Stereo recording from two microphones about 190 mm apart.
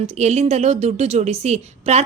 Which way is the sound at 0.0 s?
35° right (ahead or behind).